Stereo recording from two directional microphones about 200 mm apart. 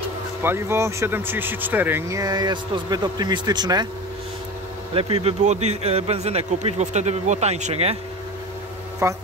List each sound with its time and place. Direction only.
0.4 s speech: 10° right (ahead or behind)
4.9 s a man's voice: 30° right (ahead or behind)
9.0 s speech: 15° right (ahead or behind)